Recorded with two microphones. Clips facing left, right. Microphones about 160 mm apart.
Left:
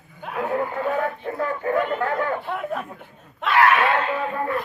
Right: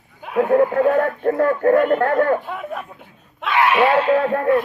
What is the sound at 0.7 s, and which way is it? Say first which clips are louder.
Speech: right 8 dB; 55° right (ahead or behind).